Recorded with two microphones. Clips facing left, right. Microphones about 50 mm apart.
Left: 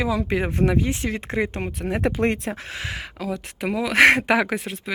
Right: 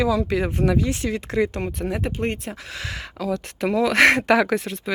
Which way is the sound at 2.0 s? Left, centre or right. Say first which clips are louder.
Left 4 dB; left.